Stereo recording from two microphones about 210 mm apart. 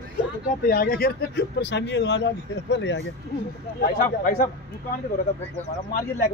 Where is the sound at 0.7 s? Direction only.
45° left (ahead or behind).